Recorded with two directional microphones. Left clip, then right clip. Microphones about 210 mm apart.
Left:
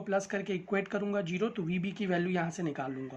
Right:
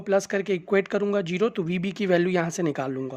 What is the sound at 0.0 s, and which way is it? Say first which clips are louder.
Speech: right 9 dB; 50° right (ahead or behind).